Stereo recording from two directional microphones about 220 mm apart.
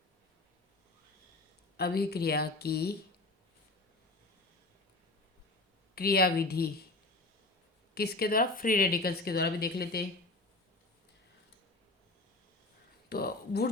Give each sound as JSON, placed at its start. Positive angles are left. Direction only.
{"t": 1.7, "sound": "speech", "side_deg": 45}
{"t": 5.9, "sound": "speech", "side_deg": 45}
{"t": 7.9, "sound": "speech", "side_deg": 45}
{"t": 13.1, "sound": "speech", "side_deg": 45}